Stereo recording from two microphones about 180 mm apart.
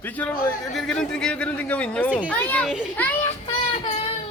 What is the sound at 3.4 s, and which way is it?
Child singing, 30° left (ahead or behind).